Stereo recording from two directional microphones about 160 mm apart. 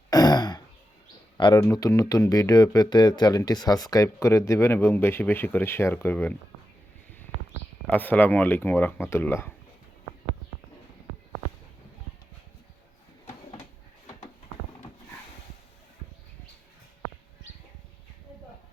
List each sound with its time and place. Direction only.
0.1 s throat clearing: 25° left (ahead or behind)
1.4 s speech: 30° left (ahead or behind); by 6.3 s 15° left (ahead or behind)
7.9 s speech: 10° left (ahead or behind)